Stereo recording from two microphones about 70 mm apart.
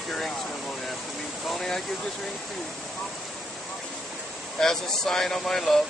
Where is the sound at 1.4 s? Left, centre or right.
Centre.